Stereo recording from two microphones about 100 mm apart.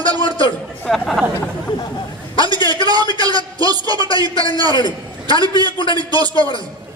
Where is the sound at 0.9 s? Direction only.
Centre (ahead or behind).